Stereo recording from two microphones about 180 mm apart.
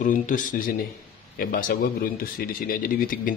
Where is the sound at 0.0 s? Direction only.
45° left (ahead or behind).